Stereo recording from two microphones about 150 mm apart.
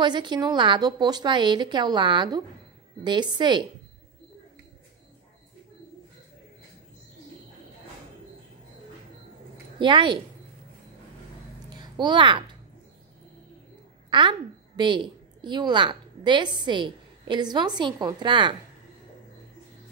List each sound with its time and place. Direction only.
0.0 s a woman's voice: 30° right (ahead or behind)
9.8 s a woman's voice: 30° right (ahead or behind)
11.7 s a sound: 30° right (ahead or behind)
14.8 s a woman's voice: 30° right (ahead or behind)